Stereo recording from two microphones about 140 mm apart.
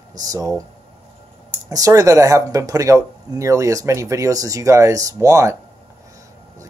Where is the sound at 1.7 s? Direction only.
25° right (ahead or behind).